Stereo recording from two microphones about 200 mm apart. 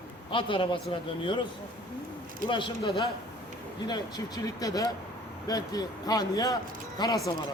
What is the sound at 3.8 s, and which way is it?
Speech, 20° left (ahead or behind).